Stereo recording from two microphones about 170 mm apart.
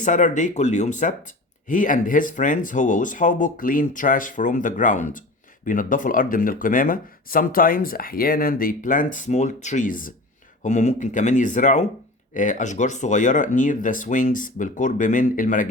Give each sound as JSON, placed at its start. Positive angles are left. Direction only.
{"t": 0.0, "sound": "speech", "side_deg": 45}